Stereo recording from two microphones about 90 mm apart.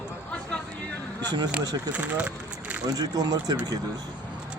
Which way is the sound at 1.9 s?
15° right (ahead or behind).